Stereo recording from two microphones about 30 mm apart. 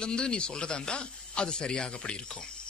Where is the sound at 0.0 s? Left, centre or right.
Left.